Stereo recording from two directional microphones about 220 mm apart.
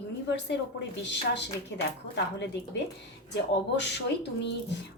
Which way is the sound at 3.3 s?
50° left (ahead or behind).